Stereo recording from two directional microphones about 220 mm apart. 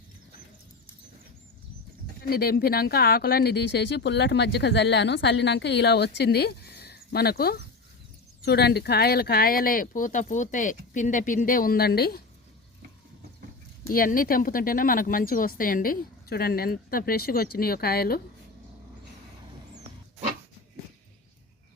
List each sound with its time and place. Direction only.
2.3 s speech: 45° left (ahead or behind)
13.9 s speech: 40° left (ahead or behind)